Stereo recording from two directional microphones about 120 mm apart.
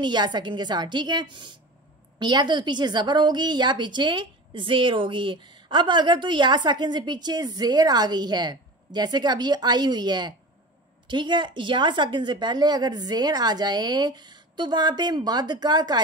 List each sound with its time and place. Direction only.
0.0 s a woman's voice: 40° right (ahead or behind)